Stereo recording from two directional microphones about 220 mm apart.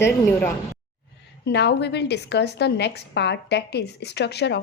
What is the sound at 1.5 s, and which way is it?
A woman's voice, 50° left (ahead or behind).